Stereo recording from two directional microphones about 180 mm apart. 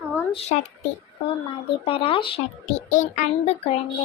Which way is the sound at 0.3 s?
35° left (ahead or behind).